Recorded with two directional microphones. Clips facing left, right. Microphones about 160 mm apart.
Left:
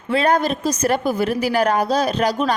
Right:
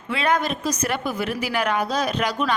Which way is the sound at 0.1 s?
40° left (ahead or behind).